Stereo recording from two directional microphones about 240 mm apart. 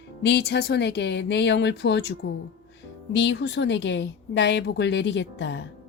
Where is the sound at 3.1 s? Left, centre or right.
Left.